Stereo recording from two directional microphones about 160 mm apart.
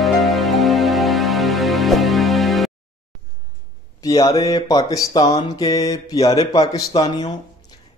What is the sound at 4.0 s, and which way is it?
A man's voice, 20° left (ahead or behind).